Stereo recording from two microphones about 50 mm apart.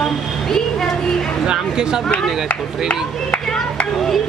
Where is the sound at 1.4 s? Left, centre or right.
Centre.